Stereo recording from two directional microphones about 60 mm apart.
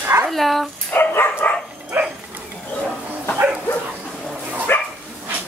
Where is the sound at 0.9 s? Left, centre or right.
Left.